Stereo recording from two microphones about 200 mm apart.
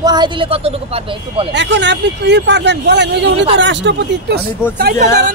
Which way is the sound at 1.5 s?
60° right (ahead or behind).